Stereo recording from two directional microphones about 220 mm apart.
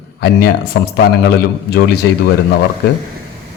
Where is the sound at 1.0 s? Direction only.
45° left (ahead or behind).